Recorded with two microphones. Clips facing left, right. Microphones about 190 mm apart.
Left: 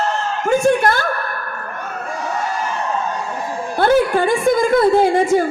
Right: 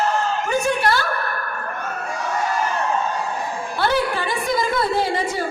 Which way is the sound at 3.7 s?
50° left (ahead or behind).